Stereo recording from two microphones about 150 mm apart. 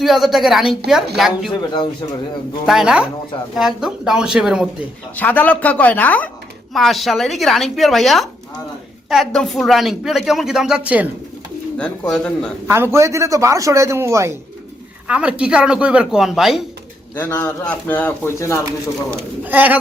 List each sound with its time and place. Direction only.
0.0 s speech: centre (ahead or behind)
1.5 s speech: 30° left (ahead or behind)
2.6 s speech: 5° right (ahead or behind)
5.1 s speech: 10° left (ahead or behind); by 11.1 s 10° right (ahead or behind)
11.8 s speech: 5° left (ahead or behind)
12.6 s a man's voice: 15° right (ahead or behind)
15.0 s speech: 5° right (ahead or behind)
17.2 s speech: 15° left (ahead or behind)
19.5 s speech: 10° right (ahead or behind)